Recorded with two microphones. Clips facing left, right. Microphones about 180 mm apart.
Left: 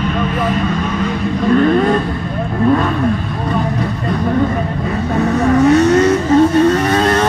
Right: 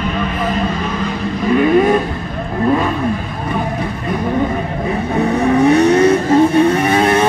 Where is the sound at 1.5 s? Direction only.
10° right (ahead or behind).